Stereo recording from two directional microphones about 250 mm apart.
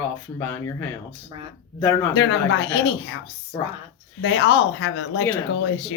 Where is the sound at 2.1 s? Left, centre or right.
Left.